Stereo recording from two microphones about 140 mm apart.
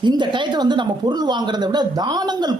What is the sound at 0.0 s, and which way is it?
Speech, 35° right (ahead or behind).